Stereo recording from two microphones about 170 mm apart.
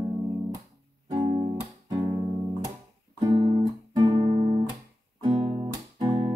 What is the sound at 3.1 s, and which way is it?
Guitar, 25° right (ahead or behind).